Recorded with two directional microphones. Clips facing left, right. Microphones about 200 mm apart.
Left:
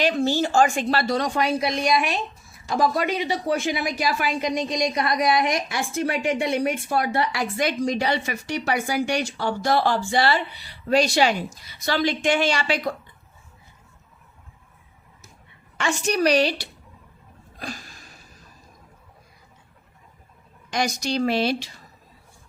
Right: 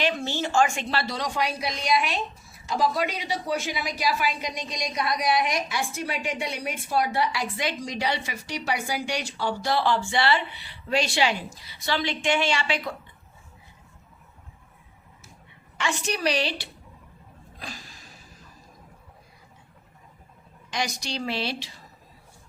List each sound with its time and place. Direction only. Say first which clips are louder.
0.0 s a woman's voice: left 6 dB; 40° left (ahead or behind)
15.8 s a woman's voice: left 5 dB; 45° left (ahead or behind)
17.6 s a sound: left 6 dB; 45° left (ahead or behind)
20.7 s a woman's voice: left 6 dB; 45° left (ahead or behind)